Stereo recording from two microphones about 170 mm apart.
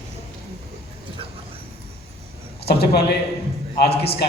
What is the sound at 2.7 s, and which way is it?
A man's voice, 70° left (ahead or behind).